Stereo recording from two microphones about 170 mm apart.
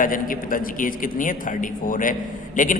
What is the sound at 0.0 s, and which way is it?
A man's voice, 55° left (ahead or behind).